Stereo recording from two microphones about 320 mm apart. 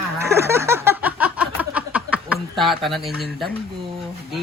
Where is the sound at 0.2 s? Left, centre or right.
Centre.